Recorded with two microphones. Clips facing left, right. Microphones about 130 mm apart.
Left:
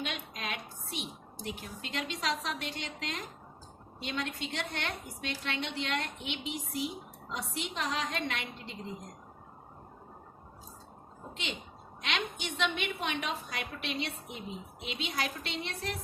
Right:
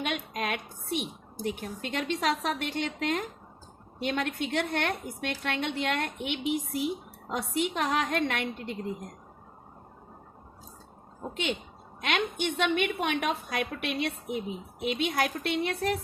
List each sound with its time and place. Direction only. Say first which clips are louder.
0.0 s a woman's voice: right 7 dB; 55° right (ahead or behind)
12.0 s a woman's voice: right 7 dB; 55° right (ahead or behind)